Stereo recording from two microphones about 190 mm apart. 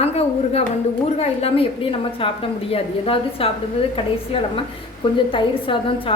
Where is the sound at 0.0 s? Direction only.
35° left (ahead or behind).